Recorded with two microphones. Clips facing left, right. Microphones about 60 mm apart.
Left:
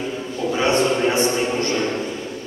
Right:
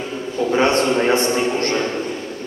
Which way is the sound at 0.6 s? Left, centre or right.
Right.